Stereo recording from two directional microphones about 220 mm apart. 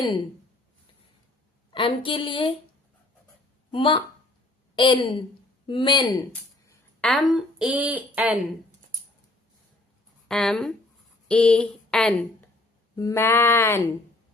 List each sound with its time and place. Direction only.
1.7 s speech: 20° left (ahead or behind)
3.7 s speech: 25° left (ahead or behind)
4.7 s a sound: 20° left (ahead or behind)
5.6 s speech: 20° left (ahead or behind)
7.0 s a woman's voice: centre (ahead or behind)
10.2 s a woman's voice: centre (ahead or behind)